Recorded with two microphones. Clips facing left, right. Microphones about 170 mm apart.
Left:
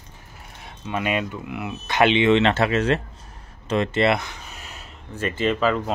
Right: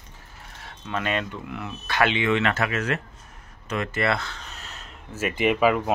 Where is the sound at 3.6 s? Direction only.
25° left (ahead or behind); by 4.8 s 10° left (ahead or behind).